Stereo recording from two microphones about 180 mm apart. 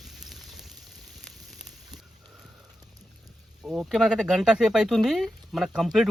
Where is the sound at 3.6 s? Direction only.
5° right (ahead or behind).